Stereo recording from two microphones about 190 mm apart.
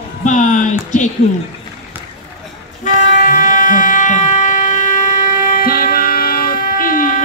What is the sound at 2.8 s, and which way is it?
Music, 45° left (ahead or behind).